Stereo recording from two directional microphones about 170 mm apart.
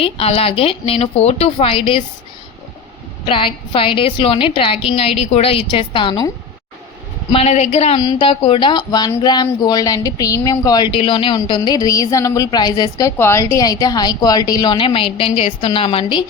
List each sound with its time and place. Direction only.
0.0 s a woman's voice: 35° left (ahead or behind)
3.2 s a woman's voice: 30° left (ahead or behind)
7.3 s a woman's voice: 40° left (ahead or behind)
7.9 s speech: 25° left (ahead or behind)